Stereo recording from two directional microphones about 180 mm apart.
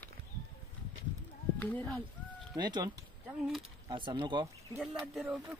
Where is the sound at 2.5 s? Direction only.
25° right (ahead or behind).